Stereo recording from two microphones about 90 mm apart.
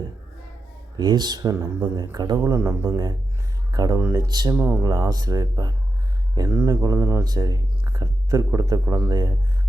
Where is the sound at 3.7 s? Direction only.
45° right (ahead or behind).